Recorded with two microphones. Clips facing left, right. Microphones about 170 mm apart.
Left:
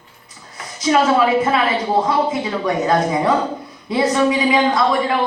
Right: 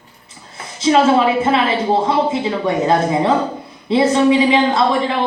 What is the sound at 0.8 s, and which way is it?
A woman's voice, 25° right (ahead or behind).